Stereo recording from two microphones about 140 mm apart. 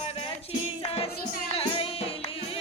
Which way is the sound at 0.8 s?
45° left (ahead or behind).